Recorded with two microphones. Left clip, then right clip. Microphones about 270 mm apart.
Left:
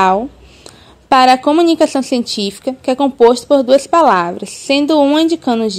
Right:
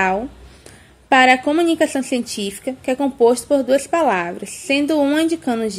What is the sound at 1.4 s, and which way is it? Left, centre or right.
Speech, left.